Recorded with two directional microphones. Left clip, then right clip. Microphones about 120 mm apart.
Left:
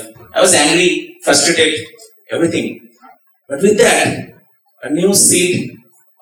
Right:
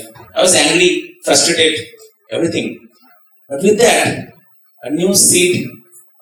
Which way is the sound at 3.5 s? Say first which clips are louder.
Even; 20° left (ahead or behind).